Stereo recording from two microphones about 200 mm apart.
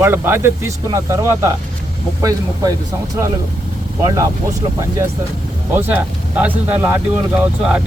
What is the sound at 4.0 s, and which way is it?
Speech, 15° right (ahead or behind).